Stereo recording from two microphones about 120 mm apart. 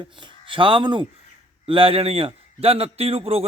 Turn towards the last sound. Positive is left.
turn(degrees=-55)  # may be behind; listen again after turning